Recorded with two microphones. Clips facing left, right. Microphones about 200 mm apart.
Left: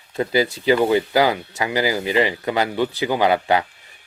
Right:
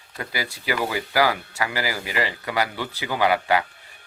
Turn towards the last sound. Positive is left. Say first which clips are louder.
# left 3 dB
turn(degrees=20)  # may be behind; listen again after turning